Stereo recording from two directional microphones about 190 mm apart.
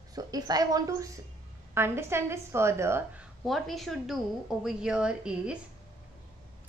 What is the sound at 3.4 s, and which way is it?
A woman's voice, centre (ahead or behind).